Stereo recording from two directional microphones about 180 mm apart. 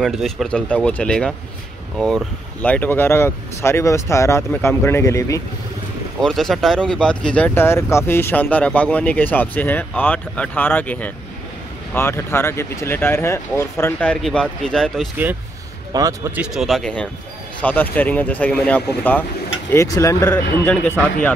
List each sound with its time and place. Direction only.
0.0 s speech: centre (ahead or behind); by 5.4 s 15° left (ahead or behind)
6.2 s speech: centre (ahead or behind)
15.9 s speech: 20° right (ahead or behind)
16.3 s speech: centre (ahead or behind)